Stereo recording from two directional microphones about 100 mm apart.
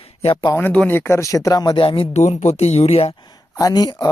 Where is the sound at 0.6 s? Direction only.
15° left (ahead or behind); by 1.8 s 40° left (ahead or behind).